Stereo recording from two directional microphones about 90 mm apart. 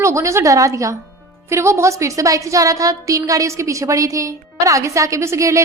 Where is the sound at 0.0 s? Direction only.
35° right (ahead or behind).